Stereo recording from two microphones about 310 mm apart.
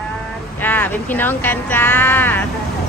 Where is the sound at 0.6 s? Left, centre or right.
Centre.